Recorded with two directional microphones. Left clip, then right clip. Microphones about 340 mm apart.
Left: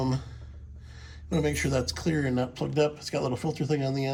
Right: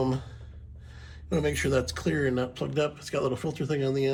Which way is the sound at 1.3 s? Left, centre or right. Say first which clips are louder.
Right 1 dB; centre.